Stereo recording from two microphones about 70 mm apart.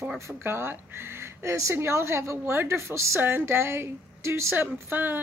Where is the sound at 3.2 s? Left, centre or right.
Right.